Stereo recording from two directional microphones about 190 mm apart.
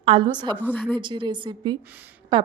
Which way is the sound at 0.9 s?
25° right (ahead or behind).